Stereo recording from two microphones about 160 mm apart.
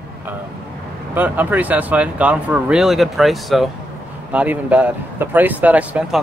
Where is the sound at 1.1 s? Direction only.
10° right (ahead or behind).